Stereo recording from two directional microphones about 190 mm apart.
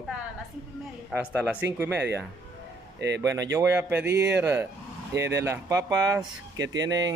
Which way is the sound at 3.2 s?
15° right (ahead or behind).